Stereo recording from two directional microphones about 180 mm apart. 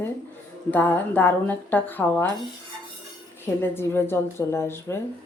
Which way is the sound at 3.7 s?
10° left (ahead or behind).